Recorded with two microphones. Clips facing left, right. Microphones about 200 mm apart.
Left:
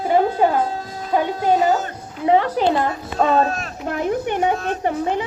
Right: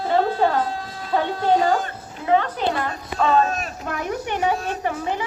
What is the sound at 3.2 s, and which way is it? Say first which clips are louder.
Speech: left 2 dB; 40° left (ahead or behind).